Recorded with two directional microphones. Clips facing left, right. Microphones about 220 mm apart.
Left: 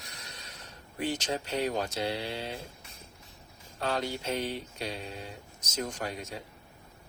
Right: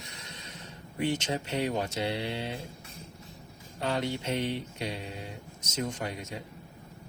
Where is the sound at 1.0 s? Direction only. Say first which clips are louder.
Right 2 dB; 25° right (ahead or behind).